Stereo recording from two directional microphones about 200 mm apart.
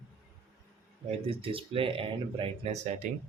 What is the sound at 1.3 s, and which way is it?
Speech, 25° right (ahead or behind).